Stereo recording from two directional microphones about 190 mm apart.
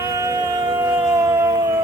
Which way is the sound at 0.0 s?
20° right (ahead or behind).